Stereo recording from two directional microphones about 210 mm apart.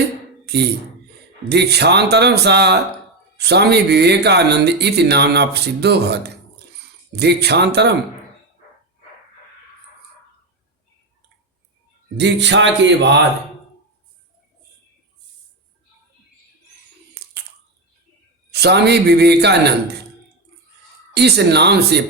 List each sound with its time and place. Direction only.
0.4 s speech: 50° right (ahead or behind)
12.1 s speech: 55° right (ahead or behind)
18.5 s speech: 50° right (ahead or behind)
21.1 s speech: 50° right (ahead or behind)